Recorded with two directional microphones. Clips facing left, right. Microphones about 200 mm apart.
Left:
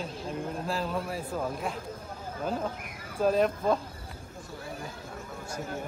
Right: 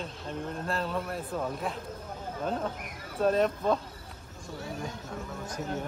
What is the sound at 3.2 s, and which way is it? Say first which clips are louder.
Speech: left 1 dB; centre (ahead or behind).